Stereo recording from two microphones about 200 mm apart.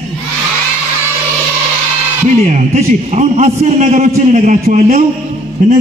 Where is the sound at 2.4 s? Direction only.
30° right (ahead or behind).